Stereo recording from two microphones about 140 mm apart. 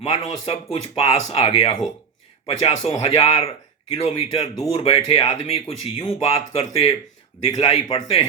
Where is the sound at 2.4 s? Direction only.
55° left (ahead or behind).